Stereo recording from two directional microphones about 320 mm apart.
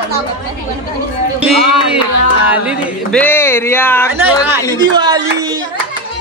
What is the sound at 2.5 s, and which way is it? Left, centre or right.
Speech, centre.